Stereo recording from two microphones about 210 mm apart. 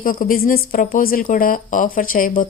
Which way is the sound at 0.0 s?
40° left (ahead or behind).